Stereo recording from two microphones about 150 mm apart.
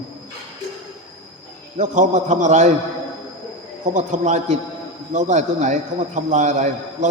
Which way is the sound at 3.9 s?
55° right (ahead or behind).